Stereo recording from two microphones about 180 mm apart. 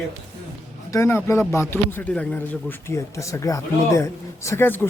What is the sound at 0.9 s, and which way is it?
Speech, 15° left (ahead or behind).